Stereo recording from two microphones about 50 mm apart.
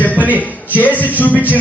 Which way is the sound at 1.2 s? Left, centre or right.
Left.